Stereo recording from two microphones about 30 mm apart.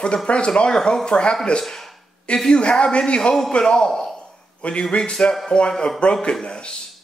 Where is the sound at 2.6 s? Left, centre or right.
Left.